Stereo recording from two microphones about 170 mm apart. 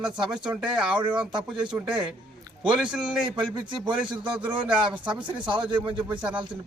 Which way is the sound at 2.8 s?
5° right (ahead or behind).